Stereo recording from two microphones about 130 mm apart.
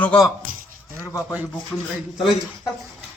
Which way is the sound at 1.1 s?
25° left (ahead or behind).